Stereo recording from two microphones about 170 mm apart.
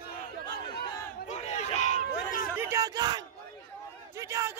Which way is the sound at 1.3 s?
40° left (ahead or behind).